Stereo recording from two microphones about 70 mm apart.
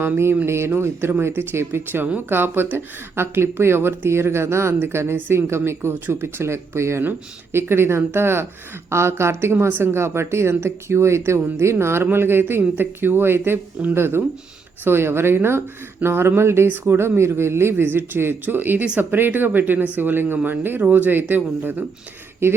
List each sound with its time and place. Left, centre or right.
0.0 s a woman's voice: right
7.0 s a woman's voice: right